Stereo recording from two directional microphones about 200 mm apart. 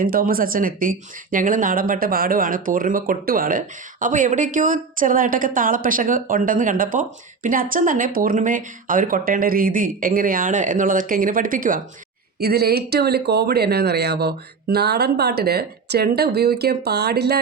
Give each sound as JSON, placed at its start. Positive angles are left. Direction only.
{"t": 0.0, "sound": "a woman's voice", "side_deg": -45}